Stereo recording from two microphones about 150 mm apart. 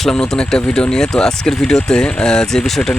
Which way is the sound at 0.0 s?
5° left (ahead or behind).